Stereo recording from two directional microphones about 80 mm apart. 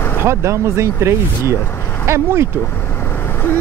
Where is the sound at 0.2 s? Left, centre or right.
Right.